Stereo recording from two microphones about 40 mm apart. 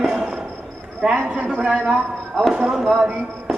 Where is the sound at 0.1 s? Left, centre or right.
Centre.